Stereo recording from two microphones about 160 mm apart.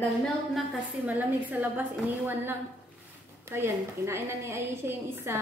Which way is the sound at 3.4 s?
15° right (ahead or behind).